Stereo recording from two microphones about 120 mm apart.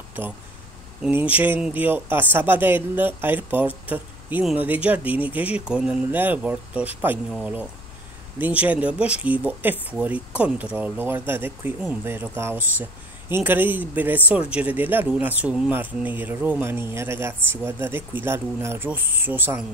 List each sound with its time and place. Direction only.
0.2 s a woman's voice: 15° right (ahead or behind)
8.4 s a woman's voice: 15° right (ahead or behind)